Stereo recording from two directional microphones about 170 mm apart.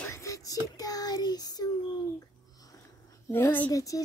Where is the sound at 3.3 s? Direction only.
10° left (ahead or behind).